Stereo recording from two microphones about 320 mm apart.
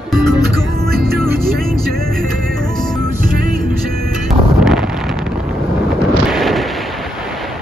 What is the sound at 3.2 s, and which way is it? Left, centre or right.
Music, right.